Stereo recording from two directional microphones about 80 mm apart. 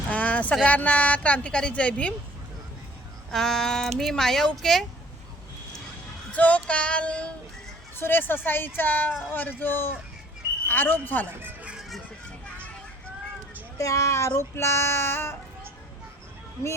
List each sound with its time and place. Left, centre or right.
0.1 s a sound: centre
0.6 s a woman's voice: centre
3.3 s speech: centre
6.3 s a woman's voice: centre
7.9 s speech: left
13.7 s speech: left